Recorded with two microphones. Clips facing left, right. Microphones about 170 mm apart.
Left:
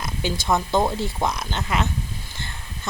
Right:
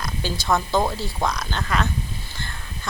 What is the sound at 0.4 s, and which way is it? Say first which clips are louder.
A woman's voice: even; 20° left (ahead or behind).